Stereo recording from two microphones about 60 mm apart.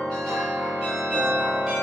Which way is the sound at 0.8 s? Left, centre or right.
Right.